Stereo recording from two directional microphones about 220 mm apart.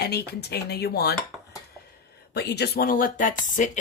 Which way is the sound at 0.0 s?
45° left (ahead or behind).